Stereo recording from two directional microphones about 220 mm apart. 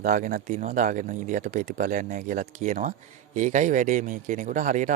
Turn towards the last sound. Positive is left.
turn(degrees=-35)  # may be behind; listen again after turning